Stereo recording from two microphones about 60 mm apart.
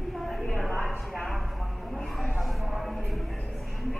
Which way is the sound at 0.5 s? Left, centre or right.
Centre.